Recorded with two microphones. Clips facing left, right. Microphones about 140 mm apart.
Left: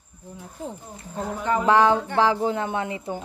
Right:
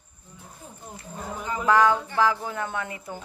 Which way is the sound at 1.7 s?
25° left (ahead or behind).